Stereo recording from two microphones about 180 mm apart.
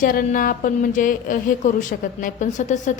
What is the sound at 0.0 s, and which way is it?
Speech, 50° left (ahead or behind).